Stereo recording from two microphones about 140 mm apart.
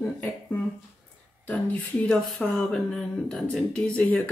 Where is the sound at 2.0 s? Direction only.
5° left (ahead or behind).